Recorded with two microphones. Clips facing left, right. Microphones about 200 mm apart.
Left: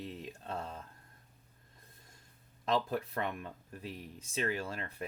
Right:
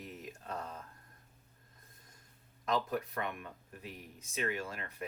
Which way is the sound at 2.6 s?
30° left (ahead or behind).